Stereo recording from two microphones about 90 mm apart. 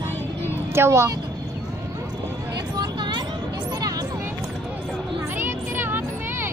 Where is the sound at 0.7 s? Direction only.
30° right (ahead or behind).